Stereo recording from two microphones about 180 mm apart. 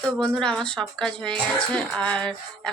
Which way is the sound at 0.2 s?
5° left (ahead or behind).